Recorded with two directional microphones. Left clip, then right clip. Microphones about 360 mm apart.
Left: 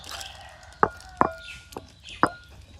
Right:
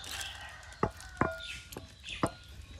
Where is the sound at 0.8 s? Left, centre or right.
Left.